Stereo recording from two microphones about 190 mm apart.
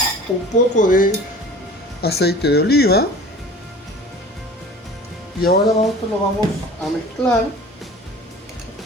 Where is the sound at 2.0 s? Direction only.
55° left (ahead or behind).